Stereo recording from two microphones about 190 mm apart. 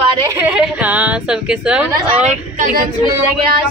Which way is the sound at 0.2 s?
15° right (ahead or behind).